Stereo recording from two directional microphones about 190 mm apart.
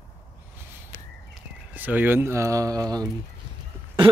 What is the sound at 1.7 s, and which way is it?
Speech, 10° right (ahead or behind).